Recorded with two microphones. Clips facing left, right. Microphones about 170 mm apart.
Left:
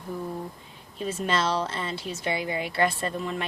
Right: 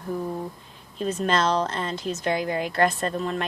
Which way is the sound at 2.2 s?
45° right (ahead or behind).